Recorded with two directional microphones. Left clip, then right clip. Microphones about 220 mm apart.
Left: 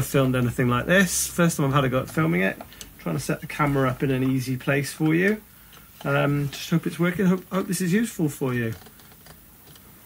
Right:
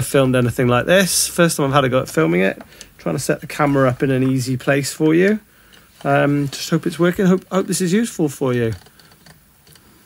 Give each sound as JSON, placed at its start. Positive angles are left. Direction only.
{"t": 0.0, "sound": "speech", "side_deg": -45}